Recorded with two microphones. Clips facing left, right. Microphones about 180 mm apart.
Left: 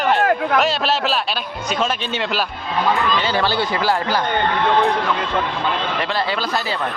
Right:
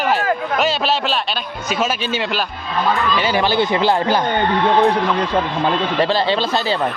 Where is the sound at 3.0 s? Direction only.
10° right (ahead or behind).